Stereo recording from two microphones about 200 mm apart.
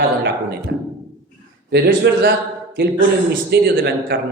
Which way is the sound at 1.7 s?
55° right (ahead or behind).